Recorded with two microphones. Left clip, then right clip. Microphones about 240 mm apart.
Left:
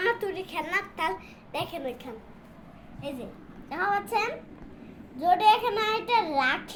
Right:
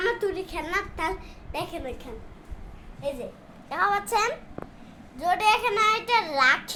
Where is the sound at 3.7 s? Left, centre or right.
Right.